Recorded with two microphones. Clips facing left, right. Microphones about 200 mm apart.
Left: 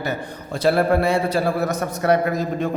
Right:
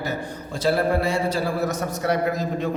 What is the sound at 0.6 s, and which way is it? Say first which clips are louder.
A man's voice: left 4 dB; 60° left (ahead or behind).